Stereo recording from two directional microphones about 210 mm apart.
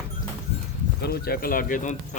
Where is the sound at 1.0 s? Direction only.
45° left (ahead or behind).